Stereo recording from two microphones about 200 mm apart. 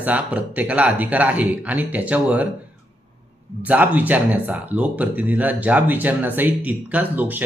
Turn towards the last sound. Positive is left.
turn(degrees=-10)  # may be behind; listen again after turning